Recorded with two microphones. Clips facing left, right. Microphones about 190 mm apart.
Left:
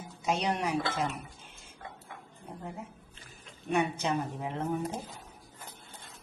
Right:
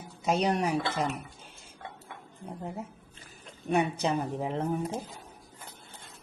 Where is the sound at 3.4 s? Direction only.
35° right (ahead or behind).